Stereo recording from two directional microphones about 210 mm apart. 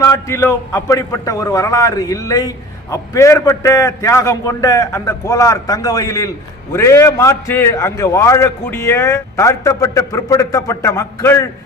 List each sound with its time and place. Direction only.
0.0 s a man's voice: 15° left (ahead or behind)